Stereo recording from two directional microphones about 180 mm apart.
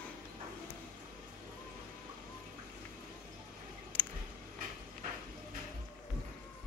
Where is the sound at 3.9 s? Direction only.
10° left (ahead or behind).